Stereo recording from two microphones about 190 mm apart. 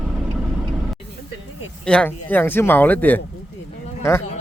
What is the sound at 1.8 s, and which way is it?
Speech, 5° left (ahead or behind).